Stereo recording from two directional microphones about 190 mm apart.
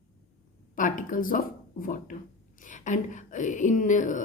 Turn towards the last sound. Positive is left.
turn(degrees=40)  # may be behind; listen again after turning